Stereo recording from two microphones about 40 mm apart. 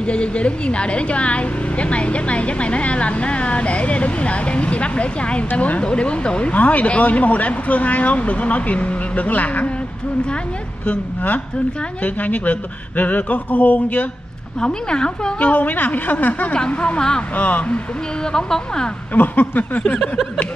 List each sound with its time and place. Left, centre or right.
0.0 s a woman's voice: left
6.5 s a woman's voice: left
10.9 s a woman's voice: left
14.6 s speech: left
15.3 s speech: left
16.5 s speech: left
17.4 s a woman's voice: left
18.3 s a woman's voice: centre
19.1 s speech: left